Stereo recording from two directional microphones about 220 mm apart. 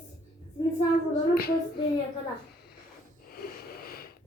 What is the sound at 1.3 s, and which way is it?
Speech, 45° left (ahead or behind).